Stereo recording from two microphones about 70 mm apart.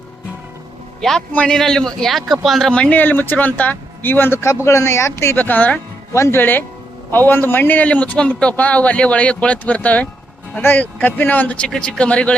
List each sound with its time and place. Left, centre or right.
1.5 s speech: centre
2.7 s speech: centre
3.0 s a man's voice: left
5.4 s a man's voice: left
6.1 s speech: left
6.4 s a man's voice: left